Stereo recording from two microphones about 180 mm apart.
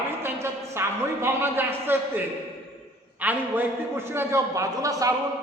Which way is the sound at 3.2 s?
10° right (ahead or behind).